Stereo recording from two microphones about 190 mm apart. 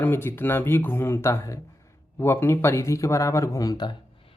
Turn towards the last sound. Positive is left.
turn(degrees=20)  # may be behind; listen again after turning